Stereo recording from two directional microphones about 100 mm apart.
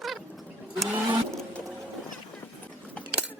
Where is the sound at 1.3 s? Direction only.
5° left (ahead or behind).